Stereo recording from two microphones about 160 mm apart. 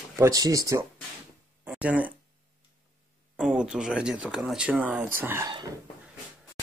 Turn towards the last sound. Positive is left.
turn(degrees=-15)  # may be behind; listen again after turning